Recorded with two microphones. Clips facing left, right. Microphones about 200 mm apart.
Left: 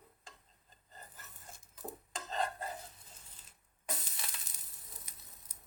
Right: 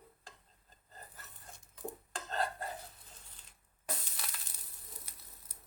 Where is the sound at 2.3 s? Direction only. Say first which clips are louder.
Even; centre (ahead or behind).